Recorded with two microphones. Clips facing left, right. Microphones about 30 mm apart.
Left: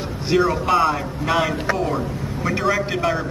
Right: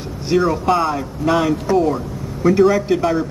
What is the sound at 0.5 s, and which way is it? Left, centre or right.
Speech, centre.